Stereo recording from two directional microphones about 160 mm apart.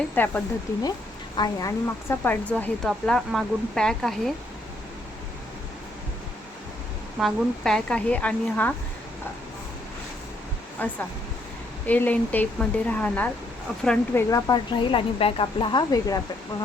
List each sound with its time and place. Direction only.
0.1 s speech: 10° left (ahead or behind)
7.2 s speech: centre (ahead or behind)
10.8 s a woman's voice: 10° left (ahead or behind)